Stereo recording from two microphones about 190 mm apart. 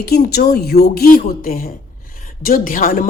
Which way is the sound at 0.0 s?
55° left (ahead or behind).